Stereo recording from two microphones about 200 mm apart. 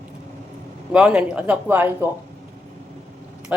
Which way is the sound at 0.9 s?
5° right (ahead or behind).